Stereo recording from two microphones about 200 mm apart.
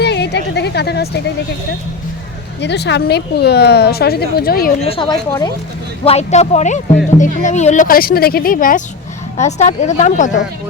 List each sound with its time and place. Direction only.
0.0 s a sound: 55° left (ahead or behind)
2.6 s a woman's voice: 60° left (ahead or behind)
4.8 s a woman's voice: 25° left (ahead or behind)